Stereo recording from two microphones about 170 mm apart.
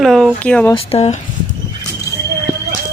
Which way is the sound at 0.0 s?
Centre (ahead or behind).